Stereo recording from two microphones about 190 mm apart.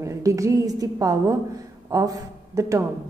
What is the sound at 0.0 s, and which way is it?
A woman's voice, 15° right (ahead or behind).